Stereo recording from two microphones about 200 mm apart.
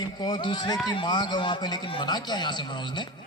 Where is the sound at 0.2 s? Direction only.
25° left (ahead or behind).